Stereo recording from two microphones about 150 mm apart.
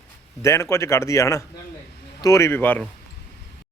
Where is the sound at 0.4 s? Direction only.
20° left (ahead or behind).